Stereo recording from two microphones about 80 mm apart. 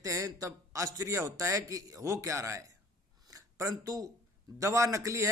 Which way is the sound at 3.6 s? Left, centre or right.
Right.